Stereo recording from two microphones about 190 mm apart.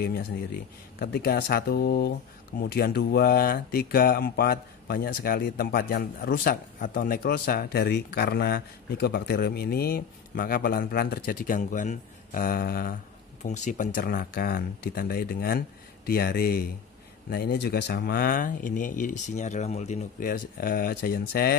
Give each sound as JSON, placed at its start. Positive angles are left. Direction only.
{"t": 0.9, "sound": "speech", "side_deg": 55}
{"t": 13.4, "sound": "speech", "side_deg": 40}